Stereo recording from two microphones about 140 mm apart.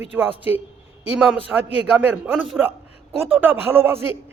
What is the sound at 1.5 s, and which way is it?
Speech, 10° right (ahead or behind).